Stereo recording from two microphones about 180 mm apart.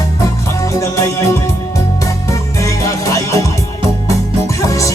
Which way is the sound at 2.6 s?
20° left (ahead or behind).